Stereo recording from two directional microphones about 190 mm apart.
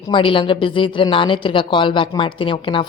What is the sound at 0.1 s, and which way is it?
A woman's voice, 25° left (ahead or behind).